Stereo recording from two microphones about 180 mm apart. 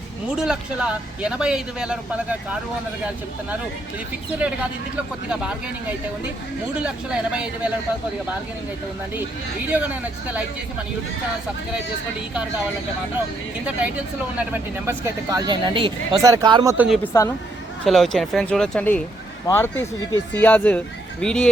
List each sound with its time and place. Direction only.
0.3 s speech: 5° right (ahead or behind)
4.4 s speech: 5° right (ahead or behind)
6.7 s speech: 5° right (ahead or behind)
9.6 s speech: 10° right (ahead or behind)
13.7 s speech: 5° right (ahead or behind); by 16.7 s 25° right (ahead or behind)
16.7 s speech: 5° right (ahead or behind)
17.0 s speech: 15° left (ahead or behind)
17.8 s speech: centre (ahead or behind)